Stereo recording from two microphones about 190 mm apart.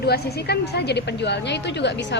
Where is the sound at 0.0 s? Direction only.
55° left (ahead or behind).